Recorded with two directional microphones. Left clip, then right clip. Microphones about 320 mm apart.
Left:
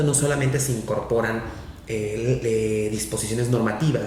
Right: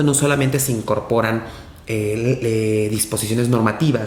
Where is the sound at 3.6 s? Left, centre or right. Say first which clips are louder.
Right 5 dB; right.